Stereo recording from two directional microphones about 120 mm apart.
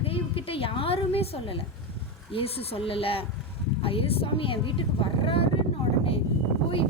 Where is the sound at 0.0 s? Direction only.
50° left (ahead or behind).